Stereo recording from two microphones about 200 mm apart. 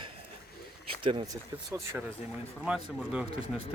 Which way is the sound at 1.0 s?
20° right (ahead or behind).